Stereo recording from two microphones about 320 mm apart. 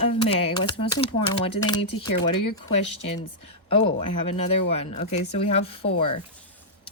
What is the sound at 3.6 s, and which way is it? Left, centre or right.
Speech, centre.